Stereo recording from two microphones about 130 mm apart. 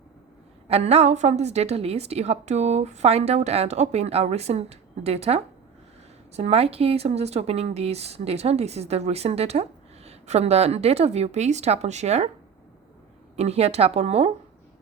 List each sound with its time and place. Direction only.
0.7 s a woman's voice: 55° right (ahead or behind)
13.3 s a woman's voice: 55° right (ahead or behind)